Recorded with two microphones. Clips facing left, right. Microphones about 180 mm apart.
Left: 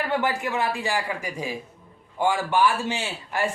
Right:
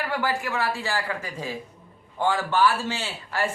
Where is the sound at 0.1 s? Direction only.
20° left (ahead or behind).